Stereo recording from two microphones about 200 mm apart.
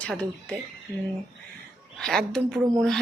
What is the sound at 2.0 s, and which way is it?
Speech, centre (ahead or behind).